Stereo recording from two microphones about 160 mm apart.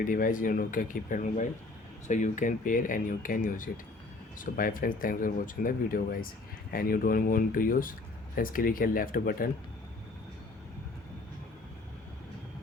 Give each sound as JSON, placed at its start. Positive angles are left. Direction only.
{"t": 0.0, "sound": "speech", "side_deg": 60}